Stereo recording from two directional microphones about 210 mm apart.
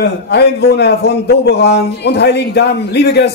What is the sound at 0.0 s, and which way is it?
A man's voice, 50° left (ahead or behind).